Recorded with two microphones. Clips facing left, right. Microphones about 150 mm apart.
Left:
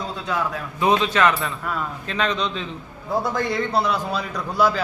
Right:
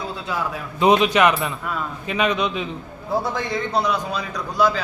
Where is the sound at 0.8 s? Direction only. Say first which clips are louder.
Right 3 dB; 20° right (ahead or behind).